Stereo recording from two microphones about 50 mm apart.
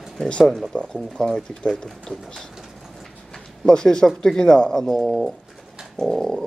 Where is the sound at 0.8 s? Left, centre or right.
Centre.